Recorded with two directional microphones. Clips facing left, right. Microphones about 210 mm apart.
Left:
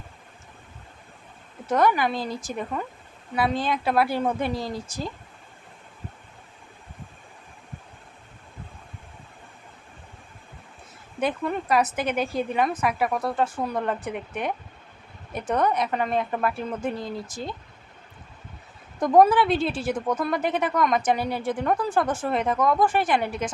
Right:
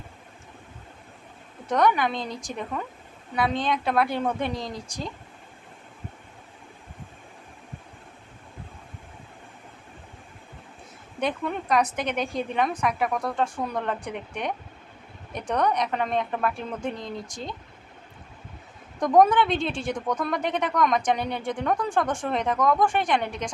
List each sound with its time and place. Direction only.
1.6 s speech: 5° left (ahead or behind)
11.2 s speech: 5° left (ahead or behind)
18.9 s speech: 5° left (ahead or behind)